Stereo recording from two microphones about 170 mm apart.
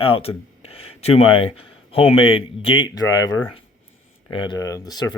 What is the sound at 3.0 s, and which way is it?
Speech, 20° left (ahead or behind).